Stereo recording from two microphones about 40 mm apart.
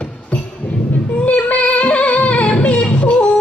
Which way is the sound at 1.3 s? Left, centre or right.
Left.